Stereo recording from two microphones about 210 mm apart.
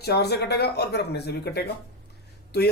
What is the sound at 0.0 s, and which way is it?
A man's voice, 50° left (ahead or behind).